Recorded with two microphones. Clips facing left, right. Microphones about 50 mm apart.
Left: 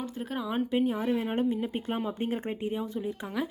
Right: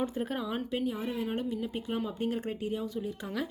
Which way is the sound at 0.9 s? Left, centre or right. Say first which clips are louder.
Left 4 dB; left.